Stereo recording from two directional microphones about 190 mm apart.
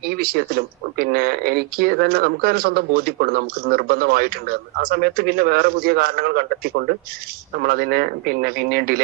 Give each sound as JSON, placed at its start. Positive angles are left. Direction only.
{"t": 0.1, "sound": "speech", "side_deg": -55}